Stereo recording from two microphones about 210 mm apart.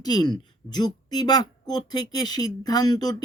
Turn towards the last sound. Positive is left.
turn(degrees=20)  # may be behind; listen again after turning